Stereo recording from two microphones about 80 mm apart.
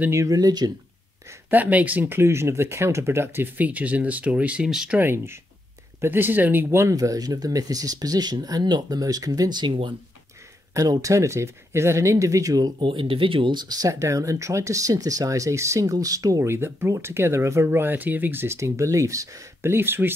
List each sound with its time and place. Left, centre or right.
0.1 s speech: right
1.5 s speech: centre
4.6 s speech: centre
4.9 s speech: right
7.0 s speech: right
10.7 s speech: right
12.8 s speech: right
16.4 s speech: right
19.7 s speech: right